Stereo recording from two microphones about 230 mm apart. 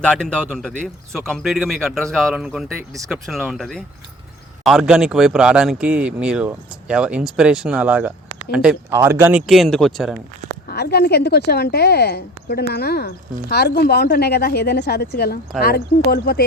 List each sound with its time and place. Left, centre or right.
0.0 s speech: centre
10.7 s a woman's voice: left